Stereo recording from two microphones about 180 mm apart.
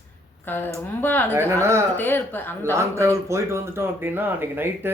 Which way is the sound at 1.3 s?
15° right (ahead or behind).